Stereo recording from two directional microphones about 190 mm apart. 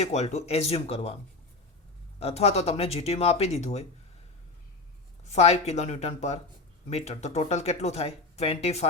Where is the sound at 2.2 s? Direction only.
30° left (ahead or behind).